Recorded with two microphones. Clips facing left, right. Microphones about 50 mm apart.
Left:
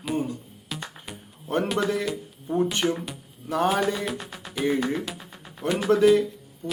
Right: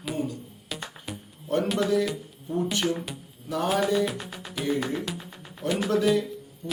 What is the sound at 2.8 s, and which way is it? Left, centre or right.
Speech, left.